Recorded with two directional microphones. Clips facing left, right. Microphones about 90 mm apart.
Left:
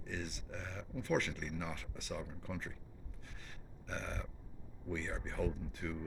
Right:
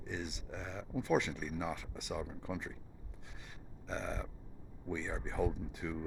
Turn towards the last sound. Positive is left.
turn(degrees=-15)  # may be behind; listen again after turning